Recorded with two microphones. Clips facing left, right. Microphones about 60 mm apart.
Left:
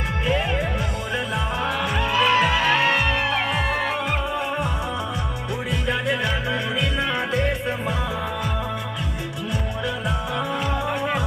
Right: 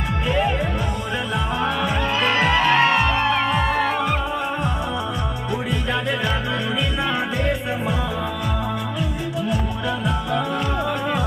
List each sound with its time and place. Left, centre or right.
2.0 s music: right
2.6 s music: centre